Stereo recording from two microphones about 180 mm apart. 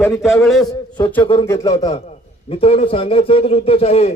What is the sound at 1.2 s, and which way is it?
Speech, 30° left (ahead or behind).